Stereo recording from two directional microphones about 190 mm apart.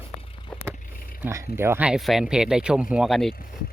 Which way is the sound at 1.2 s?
15° right (ahead or behind).